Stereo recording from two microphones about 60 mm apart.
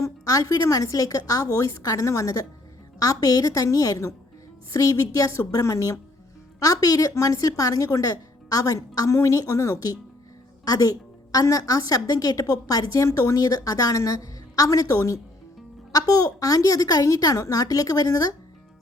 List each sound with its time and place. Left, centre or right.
0.0 s speech: left
6.6 s speech: left
10.7 s a woman's voice: left
15.9 s speech: left